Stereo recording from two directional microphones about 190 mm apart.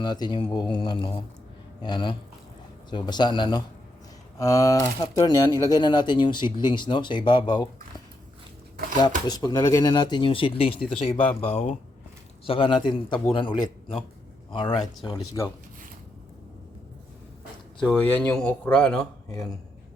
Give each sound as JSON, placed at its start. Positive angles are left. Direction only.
{"t": 0.0, "sound": "speech", "side_deg": 20}
{"t": 18.1, "sound": "speech", "side_deg": 5}